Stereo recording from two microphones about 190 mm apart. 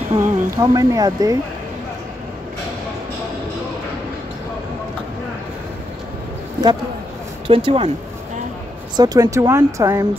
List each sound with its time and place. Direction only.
0.1 s speech: 15° right (ahead or behind)
7.4 s speech: 30° right (ahead or behind)
8.9 s speech: 20° right (ahead or behind)